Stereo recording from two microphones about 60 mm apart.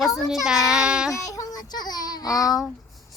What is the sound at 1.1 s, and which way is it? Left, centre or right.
Child singing, left.